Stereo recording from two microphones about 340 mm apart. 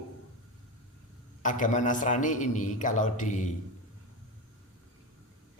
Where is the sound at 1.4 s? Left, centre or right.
Left.